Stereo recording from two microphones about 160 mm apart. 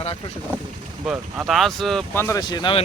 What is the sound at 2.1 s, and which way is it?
Speech, 15° left (ahead or behind).